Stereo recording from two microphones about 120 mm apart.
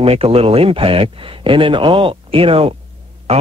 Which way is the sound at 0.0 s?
55° right (ahead or behind).